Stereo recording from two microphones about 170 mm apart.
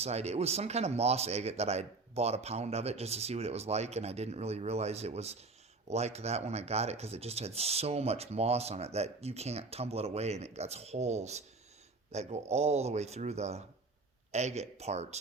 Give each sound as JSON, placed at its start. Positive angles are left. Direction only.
{"t": 0.0, "sound": "speech", "side_deg": -40}